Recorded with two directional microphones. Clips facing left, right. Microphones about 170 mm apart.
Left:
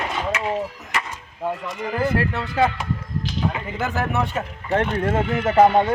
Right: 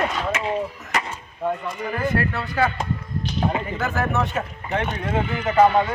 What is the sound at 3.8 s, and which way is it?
Speech, 10° left (ahead or behind).